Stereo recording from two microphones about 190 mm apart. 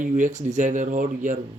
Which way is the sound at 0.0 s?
40° right (ahead or behind).